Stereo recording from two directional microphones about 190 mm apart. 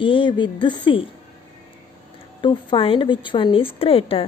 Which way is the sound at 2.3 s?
25° left (ahead or behind).